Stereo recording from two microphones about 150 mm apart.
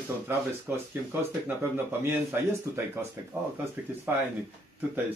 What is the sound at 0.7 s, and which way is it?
Speech, 15° right (ahead or behind).